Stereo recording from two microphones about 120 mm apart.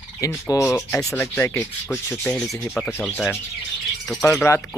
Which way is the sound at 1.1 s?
20° left (ahead or behind).